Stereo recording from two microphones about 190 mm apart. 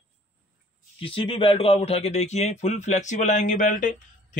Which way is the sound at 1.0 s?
30° left (ahead or behind).